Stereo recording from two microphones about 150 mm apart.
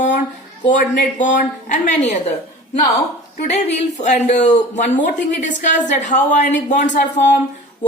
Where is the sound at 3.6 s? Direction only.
50° left (ahead or behind).